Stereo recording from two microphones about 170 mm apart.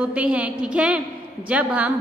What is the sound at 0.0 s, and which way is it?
A woman's voice, 5° right (ahead or behind).